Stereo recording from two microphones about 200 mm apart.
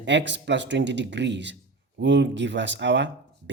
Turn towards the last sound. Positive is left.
turn(degrees=-65)  # may be behind; listen again after turning